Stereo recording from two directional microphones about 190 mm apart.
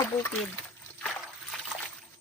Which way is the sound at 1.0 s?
5° left (ahead or behind).